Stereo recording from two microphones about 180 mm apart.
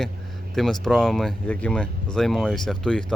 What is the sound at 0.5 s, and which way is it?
Speech, centre (ahead or behind).